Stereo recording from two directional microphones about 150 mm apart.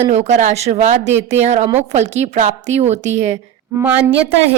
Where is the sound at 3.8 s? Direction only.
10° right (ahead or behind).